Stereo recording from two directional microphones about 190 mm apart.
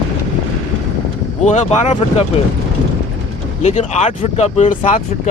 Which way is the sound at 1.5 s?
35° left (ahead or behind).